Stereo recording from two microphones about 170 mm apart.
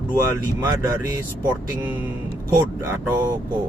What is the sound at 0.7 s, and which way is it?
Speech, 15° right (ahead or behind).